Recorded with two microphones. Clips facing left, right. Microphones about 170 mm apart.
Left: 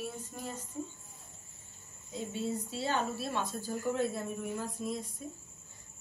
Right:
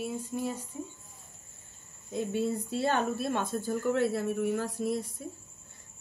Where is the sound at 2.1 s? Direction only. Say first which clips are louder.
Right 6 dB; 60° right (ahead or behind).